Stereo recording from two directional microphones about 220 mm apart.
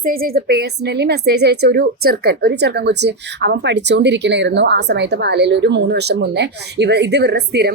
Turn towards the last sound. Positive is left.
turn(degrees=-50)  # may be behind; listen again after turning